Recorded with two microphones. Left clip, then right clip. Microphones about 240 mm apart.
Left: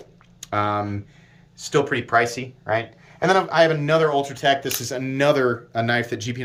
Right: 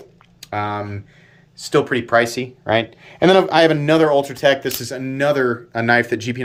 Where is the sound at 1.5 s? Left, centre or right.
Right.